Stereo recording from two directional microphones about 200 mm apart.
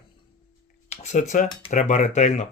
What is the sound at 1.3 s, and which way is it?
Speech, 40° left (ahead or behind).